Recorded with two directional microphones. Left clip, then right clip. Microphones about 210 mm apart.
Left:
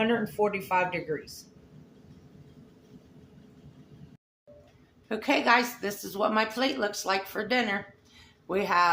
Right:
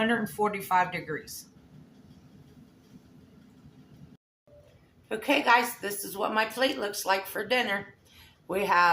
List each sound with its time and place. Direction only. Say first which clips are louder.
0.1 s speech: left 1 dB; 15° right (ahead or behind)
5.0 s speech: even; 30° left (ahead or behind)